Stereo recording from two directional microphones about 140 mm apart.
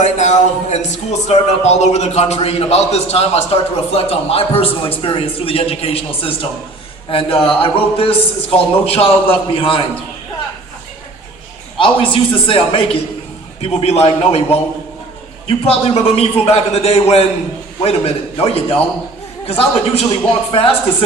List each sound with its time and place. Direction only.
0.0 s a man's voice: 55° left (ahead or behind); by 9.8 s 40° left (ahead or behind)
11.8 s a man's voice: 40° left (ahead or behind)